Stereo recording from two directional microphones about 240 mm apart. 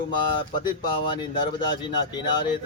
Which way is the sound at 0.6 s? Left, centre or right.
Centre.